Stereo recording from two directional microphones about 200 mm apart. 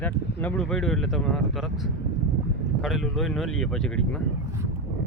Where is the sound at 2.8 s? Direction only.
Centre (ahead or behind).